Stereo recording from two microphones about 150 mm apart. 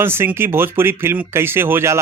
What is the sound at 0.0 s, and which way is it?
A man's voice, 15° right (ahead or behind).